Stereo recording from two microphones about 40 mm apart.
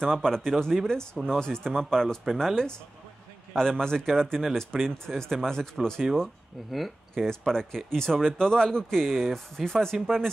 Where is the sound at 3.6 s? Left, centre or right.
Centre.